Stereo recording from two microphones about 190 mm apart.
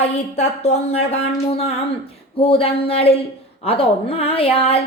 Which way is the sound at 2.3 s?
30° left (ahead or behind).